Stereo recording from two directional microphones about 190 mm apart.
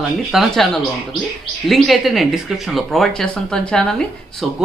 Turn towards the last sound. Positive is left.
turn(degrees=5)  # may be behind; listen again after turning